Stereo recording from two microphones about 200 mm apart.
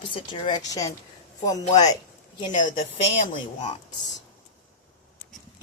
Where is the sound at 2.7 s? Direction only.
40° left (ahead or behind).